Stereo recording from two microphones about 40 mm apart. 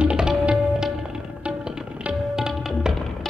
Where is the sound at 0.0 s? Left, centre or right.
Right; by 2.9 s centre.